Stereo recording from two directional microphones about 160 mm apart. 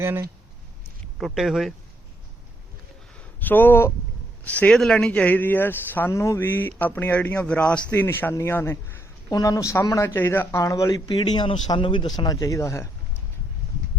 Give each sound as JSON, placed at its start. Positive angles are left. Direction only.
{"t": 0.0, "sound": "speech", "side_deg": -15}
{"t": 1.2, "sound": "speech", "side_deg": 0}
{"t": 3.4, "sound": "speech", "side_deg": 10}